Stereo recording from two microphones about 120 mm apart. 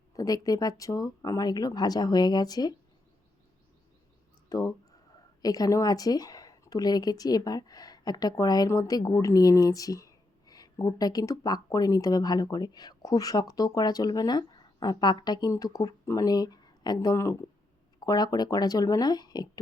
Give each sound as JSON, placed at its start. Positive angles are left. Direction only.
{"t": 0.2, "sound": "speech", "side_deg": 30}
{"t": 4.4, "sound": "speech", "side_deg": 30}